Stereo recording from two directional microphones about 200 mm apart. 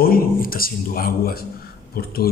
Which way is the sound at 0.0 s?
45° left (ahead or behind).